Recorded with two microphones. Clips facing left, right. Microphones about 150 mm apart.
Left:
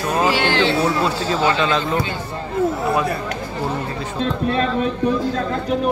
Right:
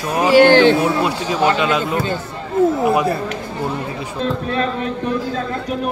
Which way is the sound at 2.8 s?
25° right (ahead or behind).